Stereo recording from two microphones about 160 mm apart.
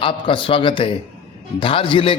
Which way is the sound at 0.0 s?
35° left (ahead or behind).